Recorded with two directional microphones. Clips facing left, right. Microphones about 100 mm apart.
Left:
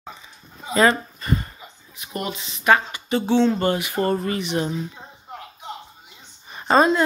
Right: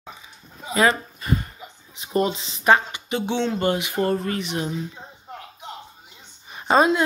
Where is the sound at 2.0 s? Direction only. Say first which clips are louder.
Right 7 dB; 30° right (ahead or behind).